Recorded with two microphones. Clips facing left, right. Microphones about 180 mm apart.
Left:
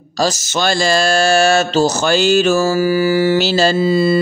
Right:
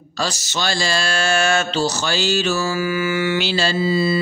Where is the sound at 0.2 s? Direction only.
45° left (ahead or behind).